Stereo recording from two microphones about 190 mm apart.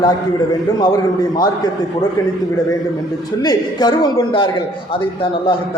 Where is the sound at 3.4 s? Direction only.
20° left (ahead or behind).